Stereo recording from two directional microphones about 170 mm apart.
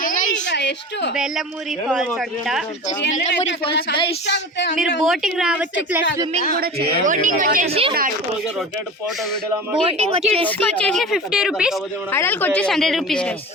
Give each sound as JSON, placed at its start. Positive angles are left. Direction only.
{"t": 0.0, "sound": "a sound", "side_deg": 50}
{"t": 0.4, "sound": "a sound", "side_deg": 90}
{"t": 1.1, "sound": "a woman's voice", "side_deg": -5}
{"t": 4.3, "sound": "speech", "side_deg": 90}
{"t": 5.0, "sound": "a woman's voice", "side_deg": 0}
{"t": 6.6, "sound": "speech", "side_deg": -70}
{"t": 7.0, "sound": "speech", "side_deg": -50}
{"t": 7.7, "sound": "speech", "side_deg": -35}
{"t": 9.8, "sound": "speech", "side_deg": -35}
{"t": 10.2, "sound": "a woman's voice", "side_deg": 10}
{"t": 12.1, "sound": "a woman's voice", "side_deg": 10}